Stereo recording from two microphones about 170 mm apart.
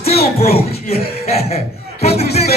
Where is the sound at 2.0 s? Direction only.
35° left (ahead or behind).